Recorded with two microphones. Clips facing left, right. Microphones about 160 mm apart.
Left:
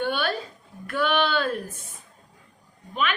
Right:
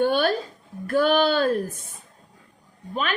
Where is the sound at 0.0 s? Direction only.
40° right (ahead or behind).